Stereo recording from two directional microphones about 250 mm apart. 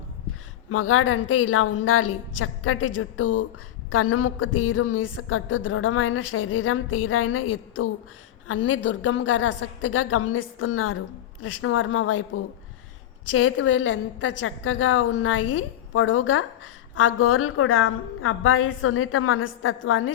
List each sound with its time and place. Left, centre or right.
0.7 s a woman's voice: left
13.3 s a woman's voice: left